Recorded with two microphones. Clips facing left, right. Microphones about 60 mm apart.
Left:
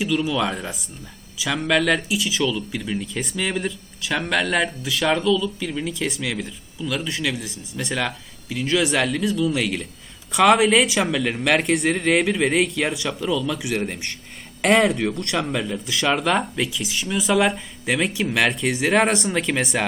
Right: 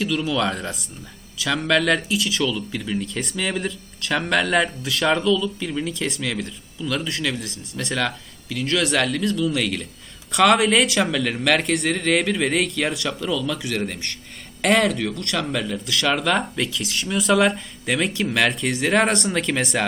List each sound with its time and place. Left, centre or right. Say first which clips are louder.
0.0 s a man's voice: even; centre